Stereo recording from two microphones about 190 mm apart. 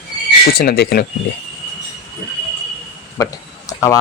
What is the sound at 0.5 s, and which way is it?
Speech, 55° left (ahead or behind).